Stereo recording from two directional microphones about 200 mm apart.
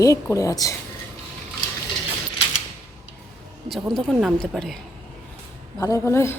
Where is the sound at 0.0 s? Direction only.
15° left (ahead or behind).